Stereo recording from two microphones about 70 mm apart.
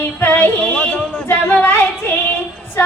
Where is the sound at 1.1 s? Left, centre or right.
Left.